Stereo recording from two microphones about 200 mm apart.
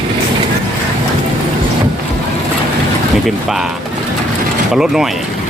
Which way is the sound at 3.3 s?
Centre (ahead or behind).